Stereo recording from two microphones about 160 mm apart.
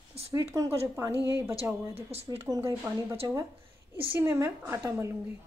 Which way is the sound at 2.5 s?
15° right (ahead or behind).